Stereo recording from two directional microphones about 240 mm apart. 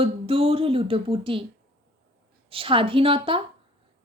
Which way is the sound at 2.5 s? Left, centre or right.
Right.